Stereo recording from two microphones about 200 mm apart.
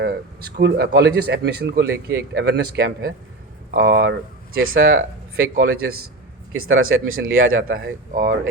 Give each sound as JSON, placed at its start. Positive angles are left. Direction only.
{"t": 0.0, "sound": "speech", "side_deg": -50}
{"t": 4.5, "sound": "speech", "side_deg": -90}
{"t": 5.4, "sound": "speech", "side_deg": -50}
{"t": 6.5, "sound": "speech", "side_deg": -90}
{"t": 8.1, "sound": "speech", "side_deg": -45}